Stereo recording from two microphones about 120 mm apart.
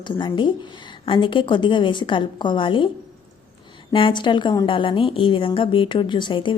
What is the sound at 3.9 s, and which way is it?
A woman's voice, 45° left (ahead or behind).